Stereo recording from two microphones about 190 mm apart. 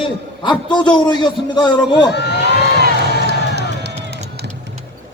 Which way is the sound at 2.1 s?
65° left (ahead or behind).